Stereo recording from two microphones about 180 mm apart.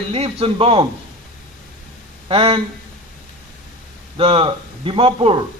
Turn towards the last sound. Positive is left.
turn(degrees=-25)  # may be behind; listen again after turning